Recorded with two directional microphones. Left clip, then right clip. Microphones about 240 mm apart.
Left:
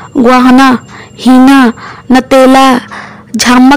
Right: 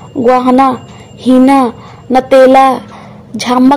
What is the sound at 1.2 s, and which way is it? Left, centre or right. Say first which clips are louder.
Speech: left 3 dB; left.